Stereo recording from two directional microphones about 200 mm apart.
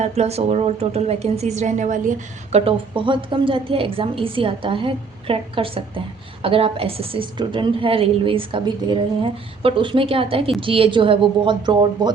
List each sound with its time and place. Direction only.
0.0 s a woman's voice: 30° right (ahead or behind)